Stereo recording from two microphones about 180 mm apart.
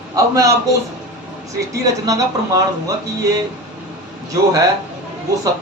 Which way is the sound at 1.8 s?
20° right (ahead or behind).